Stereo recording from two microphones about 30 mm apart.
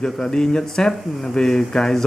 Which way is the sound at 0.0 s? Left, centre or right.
Left.